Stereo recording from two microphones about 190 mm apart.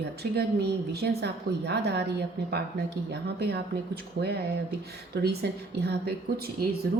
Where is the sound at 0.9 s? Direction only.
60° right (ahead or behind).